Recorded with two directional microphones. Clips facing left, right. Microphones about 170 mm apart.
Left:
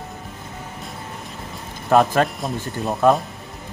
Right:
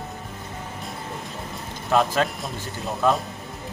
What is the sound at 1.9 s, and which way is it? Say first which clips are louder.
A man's voice: left 5 dB; 50° left (ahead or behind).